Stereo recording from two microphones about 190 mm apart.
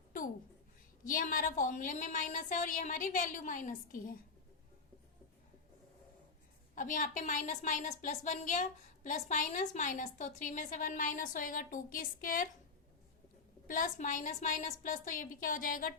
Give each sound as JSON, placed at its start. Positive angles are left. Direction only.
{"t": 1.0, "sound": "a woman's voice", "side_deg": 45}
{"t": 6.7, "sound": "a woman's voice", "side_deg": 40}
{"t": 13.7, "sound": "a woman's voice", "side_deg": 45}